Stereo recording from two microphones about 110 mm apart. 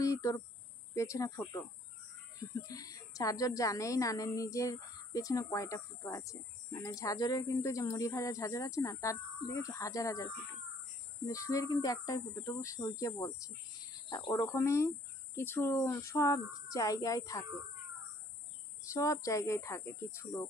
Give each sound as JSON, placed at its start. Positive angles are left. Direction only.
{"t": 0.0, "sound": "cricket", "side_deg": 30}
{"t": 0.9, "sound": "a woman's voice", "side_deg": 25}
{"t": 14.3, "sound": "a woman's voice", "side_deg": 25}
{"t": 18.9, "sound": "a woman's voice", "side_deg": 30}